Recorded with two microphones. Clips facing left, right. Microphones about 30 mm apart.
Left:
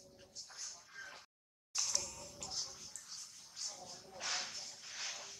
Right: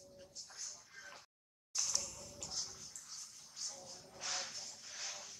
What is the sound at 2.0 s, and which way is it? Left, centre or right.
Music, centre.